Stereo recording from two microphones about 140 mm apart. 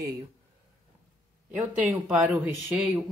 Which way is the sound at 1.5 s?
10° right (ahead or behind).